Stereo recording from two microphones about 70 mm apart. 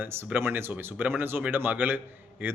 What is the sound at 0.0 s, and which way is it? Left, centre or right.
Speech, right.